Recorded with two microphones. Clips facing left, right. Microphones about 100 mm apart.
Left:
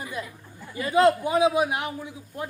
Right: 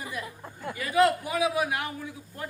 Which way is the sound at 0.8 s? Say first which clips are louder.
Left 3 dB; 25° left (ahead or behind).